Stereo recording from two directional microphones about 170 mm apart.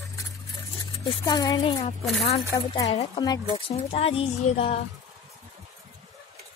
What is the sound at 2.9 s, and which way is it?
Speech, 35° left (ahead or behind).